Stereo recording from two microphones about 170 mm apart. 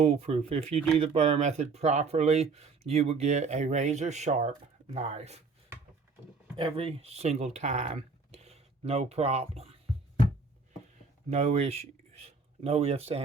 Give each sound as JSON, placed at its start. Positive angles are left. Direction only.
{"t": 0.0, "sound": "speech", "side_deg": -35}
{"t": 6.6, "sound": "speech", "side_deg": -35}
{"t": 11.3, "sound": "speech", "side_deg": -40}